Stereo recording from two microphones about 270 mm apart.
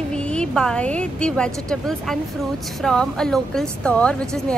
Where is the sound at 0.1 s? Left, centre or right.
Centre.